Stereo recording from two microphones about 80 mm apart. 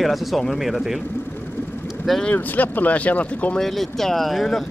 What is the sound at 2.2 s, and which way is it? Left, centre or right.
Speech, left.